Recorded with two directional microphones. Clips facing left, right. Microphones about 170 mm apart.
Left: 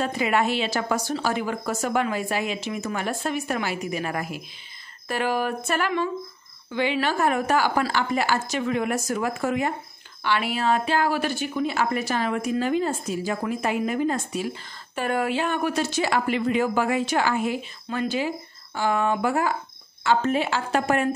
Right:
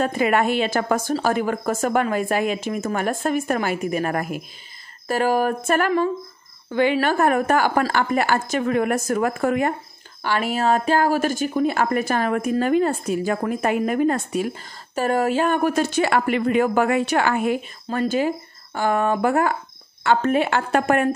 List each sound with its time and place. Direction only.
0.0 s a woman's voice: 50° right (ahead or behind)
10.2 s a woman's voice: 45° right (ahead or behind)
15.0 s a woman's voice: 40° right (ahead or behind); by 21.1 s 55° right (ahead or behind)